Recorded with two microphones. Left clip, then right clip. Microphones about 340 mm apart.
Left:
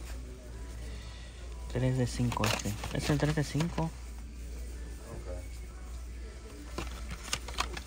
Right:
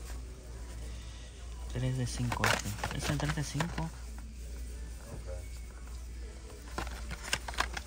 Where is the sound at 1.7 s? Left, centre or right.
Centre.